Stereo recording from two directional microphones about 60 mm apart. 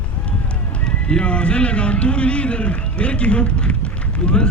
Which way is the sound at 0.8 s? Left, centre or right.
Centre.